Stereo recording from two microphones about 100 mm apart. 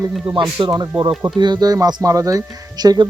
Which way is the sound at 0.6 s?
50° right (ahead or behind).